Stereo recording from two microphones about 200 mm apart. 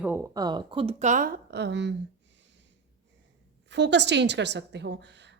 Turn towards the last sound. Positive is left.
turn(degrees=-60)  # may be behind; listen again after turning